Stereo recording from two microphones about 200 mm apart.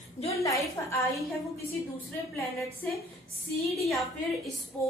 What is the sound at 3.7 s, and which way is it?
Speech, centre (ahead or behind).